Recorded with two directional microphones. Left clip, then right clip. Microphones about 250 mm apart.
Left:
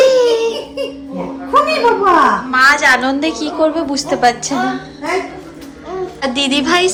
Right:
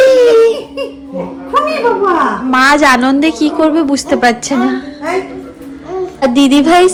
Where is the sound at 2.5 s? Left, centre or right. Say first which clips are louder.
Right 6 dB; centre; by 4.8 s right.